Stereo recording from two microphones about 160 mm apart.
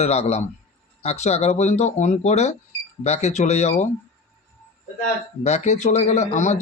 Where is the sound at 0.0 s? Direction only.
40° left (ahead or behind).